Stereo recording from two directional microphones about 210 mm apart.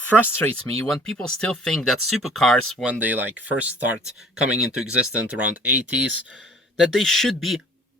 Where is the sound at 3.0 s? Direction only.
10° right (ahead or behind).